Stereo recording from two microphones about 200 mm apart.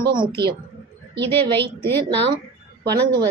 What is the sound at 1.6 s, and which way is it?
Speech, 10° left (ahead or behind).